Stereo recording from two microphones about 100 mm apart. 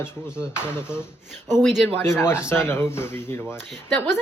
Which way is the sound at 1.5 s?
Centre (ahead or behind).